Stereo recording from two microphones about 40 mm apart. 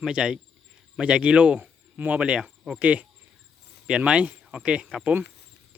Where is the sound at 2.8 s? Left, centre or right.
Right.